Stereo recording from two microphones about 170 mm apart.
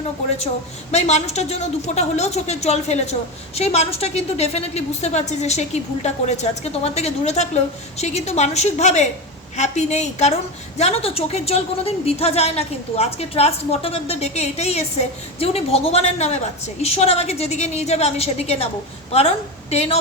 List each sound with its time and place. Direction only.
0.3 s a woman's voice: 40° left (ahead or behind)
19.7 s a woman's voice: 35° left (ahead or behind)